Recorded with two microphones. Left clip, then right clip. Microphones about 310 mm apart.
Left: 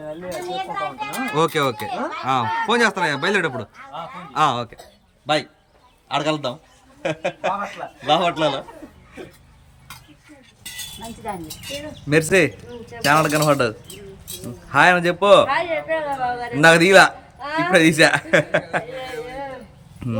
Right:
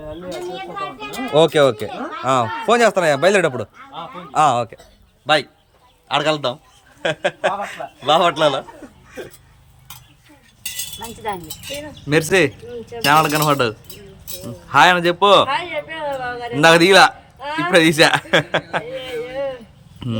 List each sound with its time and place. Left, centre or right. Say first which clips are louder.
1.4 s a man's voice: right 7 dB; centre
11.4 s speech: right 1 dB; centre
12.0 s speech: right 1 dB; centre